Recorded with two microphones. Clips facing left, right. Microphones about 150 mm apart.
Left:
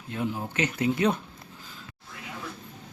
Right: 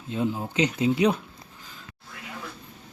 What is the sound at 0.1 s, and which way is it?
Speech, 20° right (ahead or behind).